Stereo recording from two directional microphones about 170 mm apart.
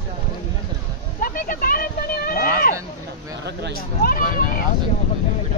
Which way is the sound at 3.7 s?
60° left (ahead or behind).